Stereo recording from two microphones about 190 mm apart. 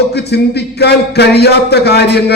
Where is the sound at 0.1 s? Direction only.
60° left (ahead or behind).